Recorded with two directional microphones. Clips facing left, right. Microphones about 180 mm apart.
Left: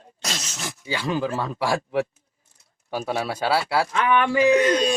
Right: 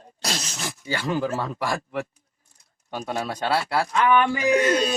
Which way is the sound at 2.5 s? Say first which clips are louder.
Left 4 dB; 5° left (ahead or behind).